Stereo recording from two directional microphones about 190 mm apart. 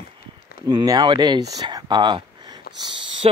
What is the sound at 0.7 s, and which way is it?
Speech, 20° right (ahead or behind).